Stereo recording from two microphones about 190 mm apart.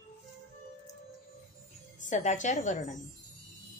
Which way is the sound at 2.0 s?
40° left (ahead or behind).